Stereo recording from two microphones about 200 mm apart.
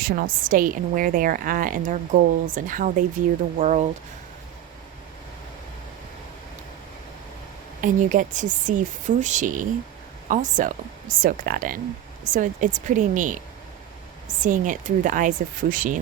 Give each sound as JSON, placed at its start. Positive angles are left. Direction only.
{"t": 0.0, "sound": "a woman's voice", "side_deg": -45}
{"t": 7.8, "sound": "a woman's voice", "side_deg": -40}